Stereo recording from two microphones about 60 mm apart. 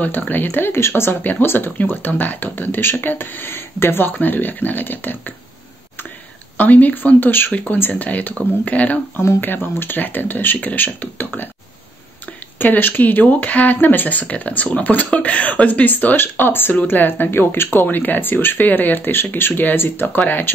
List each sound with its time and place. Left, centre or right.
0.3 s speech: left
6.6 s speech: left
9.4 s speech: left
12.5 s speech: left